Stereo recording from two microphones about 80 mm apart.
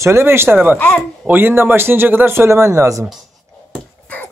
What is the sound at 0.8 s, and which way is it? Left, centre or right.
Speech, centre.